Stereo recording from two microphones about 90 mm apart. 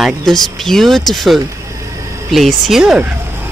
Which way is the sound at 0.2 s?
5° left (ahead or behind).